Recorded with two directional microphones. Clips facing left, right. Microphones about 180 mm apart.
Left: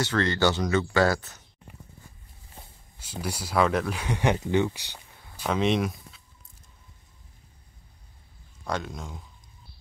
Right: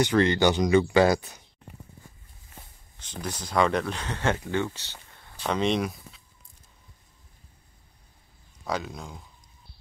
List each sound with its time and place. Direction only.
0.0 s speech: 15° right (ahead or behind)
3.0 s speech: 10° left (ahead or behind)
8.6 s speech: centre (ahead or behind)